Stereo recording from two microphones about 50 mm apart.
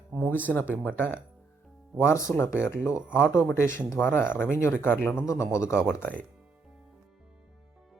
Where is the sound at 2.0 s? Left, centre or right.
Left.